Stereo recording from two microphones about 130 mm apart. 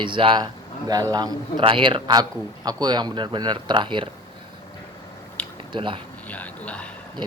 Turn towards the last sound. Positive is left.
turn(degrees=10)  # may be behind; listen again after turning